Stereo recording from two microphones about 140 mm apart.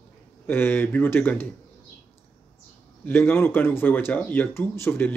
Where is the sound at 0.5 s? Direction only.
15° left (ahead or behind).